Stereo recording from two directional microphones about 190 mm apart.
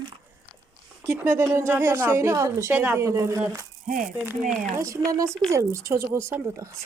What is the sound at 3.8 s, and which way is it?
Speech, 45° right (ahead or behind).